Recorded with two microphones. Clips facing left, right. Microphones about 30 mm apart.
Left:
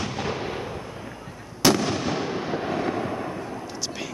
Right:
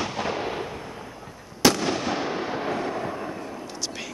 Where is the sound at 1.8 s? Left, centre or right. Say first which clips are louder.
Even; centre.